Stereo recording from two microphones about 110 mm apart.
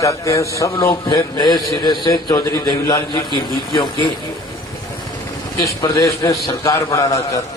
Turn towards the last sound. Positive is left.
turn(degrees=30)  # may be behind; listen again after turning